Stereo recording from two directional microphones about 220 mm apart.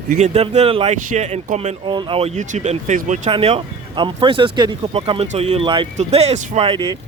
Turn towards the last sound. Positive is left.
turn(degrees=-20)  # may be behind; listen again after turning